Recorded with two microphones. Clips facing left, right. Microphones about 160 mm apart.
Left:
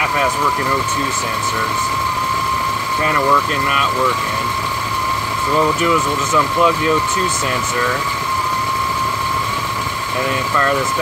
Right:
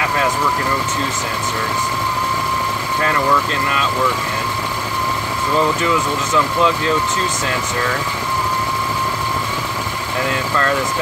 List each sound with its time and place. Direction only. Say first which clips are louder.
6.3 s speech: left 1 dB; 5° left (ahead or behind)